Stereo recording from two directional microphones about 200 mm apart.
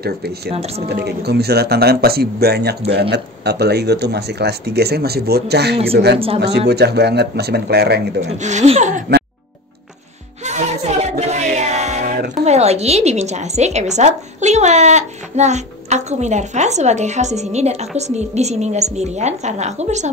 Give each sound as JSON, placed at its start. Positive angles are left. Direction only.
{"t": 0.0, "sound": "a man's voice", "side_deg": -50}
{"t": 0.5, "sound": "a woman's voice", "side_deg": -30}
{"t": 0.8, "sound": "a man's voice", "side_deg": -55}
{"t": 6.1, "sound": "speech", "side_deg": -30}
{"t": 6.7, "sound": "speech", "side_deg": -55}
{"t": 8.2, "sound": "a woman's voice", "side_deg": -35}
{"t": 10.4, "sound": "music", "side_deg": -35}
{"t": 12.4, "sound": "a woman's voice", "side_deg": -30}